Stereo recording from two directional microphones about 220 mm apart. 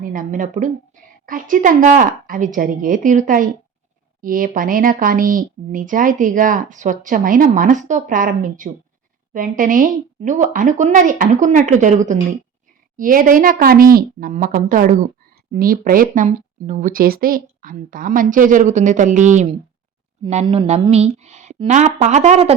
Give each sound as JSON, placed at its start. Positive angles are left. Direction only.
{"t": 0.0, "sound": "speech", "side_deg": -35}